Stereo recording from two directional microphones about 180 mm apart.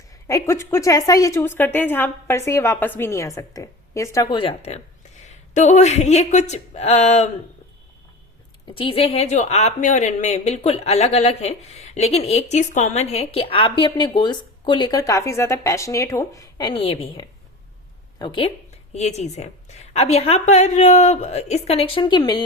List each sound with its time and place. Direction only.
0.1 s a woman's voice: 20° left (ahead or behind); by 7.3 s 35° left (ahead or behind)
8.6 s speech: 30° left (ahead or behind)
18.9 s speech: 40° left (ahead or behind)